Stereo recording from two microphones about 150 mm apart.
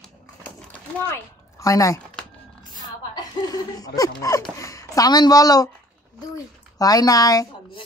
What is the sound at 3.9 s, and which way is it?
A woman's voice, 25° left (ahead or behind).